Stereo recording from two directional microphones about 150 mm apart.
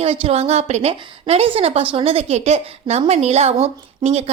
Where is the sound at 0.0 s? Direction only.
40° right (ahead or behind).